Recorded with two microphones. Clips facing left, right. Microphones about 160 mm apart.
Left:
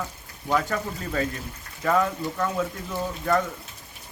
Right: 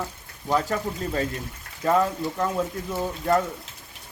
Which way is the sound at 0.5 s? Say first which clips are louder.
Right 1 dB; 30° right (ahead or behind).